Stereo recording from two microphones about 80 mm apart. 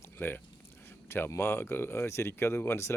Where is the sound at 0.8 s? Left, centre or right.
Left.